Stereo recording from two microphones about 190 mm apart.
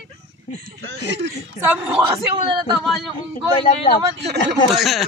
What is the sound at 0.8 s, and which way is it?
Speech, 70° right (ahead or behind).